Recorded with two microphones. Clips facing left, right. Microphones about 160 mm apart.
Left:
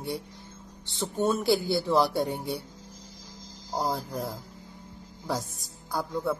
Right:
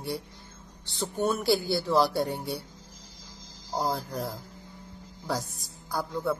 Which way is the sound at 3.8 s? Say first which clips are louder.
Even; 20° left (ahead or behind).